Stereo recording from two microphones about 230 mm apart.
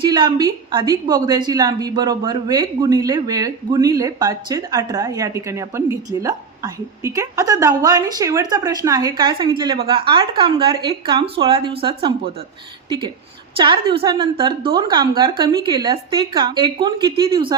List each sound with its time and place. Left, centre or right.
0.0 s a woman's voice: centre
13.6 s a woman's voice: right